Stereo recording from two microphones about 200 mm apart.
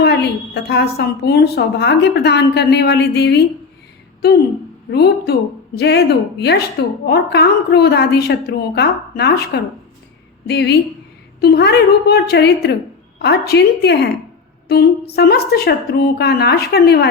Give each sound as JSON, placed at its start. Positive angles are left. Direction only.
{"t": 0.0, "sound": "a woman's voice", "side_deg": 55}
{"t": 4.9, "sound": "a woman's voice", "side_deg": 55}